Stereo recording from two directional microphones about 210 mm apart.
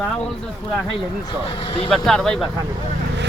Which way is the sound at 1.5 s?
25° left (ahead or behind).